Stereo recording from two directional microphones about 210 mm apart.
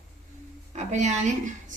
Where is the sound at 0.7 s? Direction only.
35° right (ahead or behind).